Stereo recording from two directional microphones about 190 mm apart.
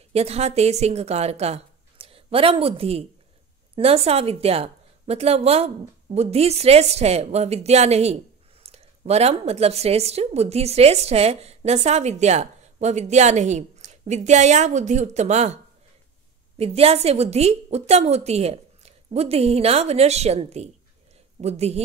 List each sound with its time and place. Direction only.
0.1 s a woman's voice: 35° right (ahead or behind)
16.5 s a woman's voice: 30° right (ahead or behind)